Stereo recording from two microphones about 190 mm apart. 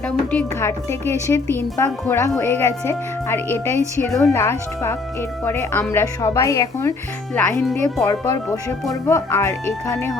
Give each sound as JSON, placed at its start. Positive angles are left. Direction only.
{"t": 0.3, "sound": "speech", "side_deg": 5}
{"t": 8.0, "sound": "speech", "side_deg": 15}